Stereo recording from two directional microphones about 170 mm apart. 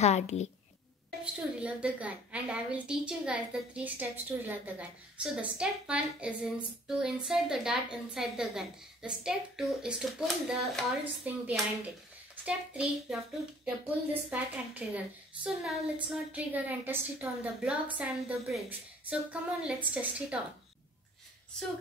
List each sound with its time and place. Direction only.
0.0 s a child's voice: 40° left (ahead or behind)
1.2 s a woman's voice: 5° right (ahead or behind)